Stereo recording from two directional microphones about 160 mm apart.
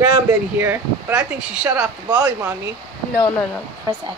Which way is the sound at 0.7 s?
5° right (ahead or behind).